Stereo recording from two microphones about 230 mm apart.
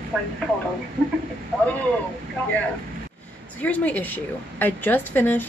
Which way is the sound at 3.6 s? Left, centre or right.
Centre.